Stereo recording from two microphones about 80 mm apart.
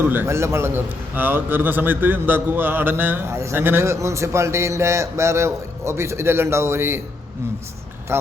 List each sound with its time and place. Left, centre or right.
0.1 s a man's voice: right
8.1 s a man's voice: right